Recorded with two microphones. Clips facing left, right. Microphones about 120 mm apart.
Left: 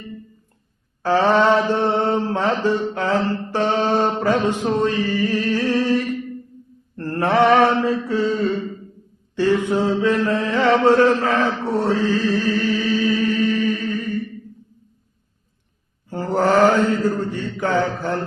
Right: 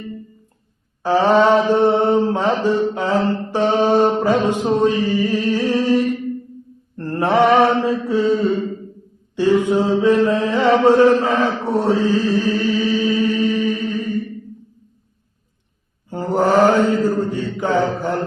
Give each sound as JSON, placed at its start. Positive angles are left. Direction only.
{"t": 1.0, "sound": "mantra", "side_deg": -15}
{"t": 9.3, "sound": "chant", "side_deg": -15}
{"t": 16.0, "sound": "mantra", "side_deg": -15}
{"t": 17.0, "sound": "a sound", "side_deg": -15}